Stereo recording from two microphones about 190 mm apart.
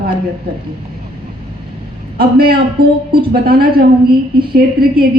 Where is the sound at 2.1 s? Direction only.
50° right (ahead or behind).